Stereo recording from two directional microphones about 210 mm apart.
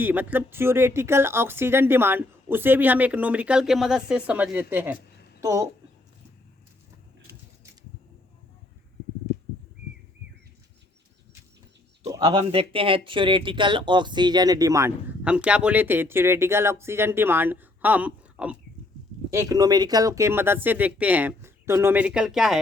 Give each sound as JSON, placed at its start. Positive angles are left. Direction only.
{"t": 0.0, "sound": "speech", "side_deg": -10}
{"t": 12.0, "sound": "speech", "side_deg": -15}